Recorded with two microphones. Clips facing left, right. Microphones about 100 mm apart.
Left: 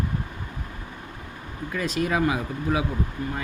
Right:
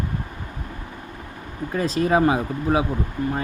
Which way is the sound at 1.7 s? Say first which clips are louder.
Right 5 dB; 35° right (ahead or behind).